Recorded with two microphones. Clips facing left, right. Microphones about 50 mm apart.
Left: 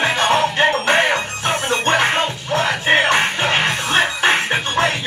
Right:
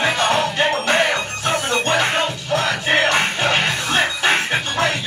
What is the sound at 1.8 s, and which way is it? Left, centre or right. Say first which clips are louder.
Music: left 2 dB; left.